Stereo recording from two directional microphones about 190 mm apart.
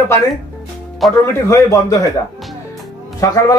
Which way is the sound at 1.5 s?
15° left (ahead or behind).